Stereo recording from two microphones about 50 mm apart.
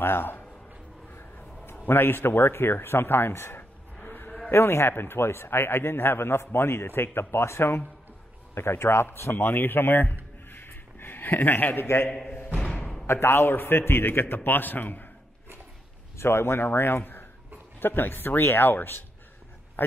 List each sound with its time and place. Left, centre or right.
0.0 s speech: left
1.9 s speech: left
4.0 s a sound: left
4.5 s a man's voice: left
12.6 s a sound: left
13.0 s a man's voice: left
16.2 s speech: left